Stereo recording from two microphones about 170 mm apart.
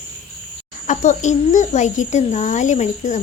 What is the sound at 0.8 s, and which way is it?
Speech, 45° left (ahead or behind).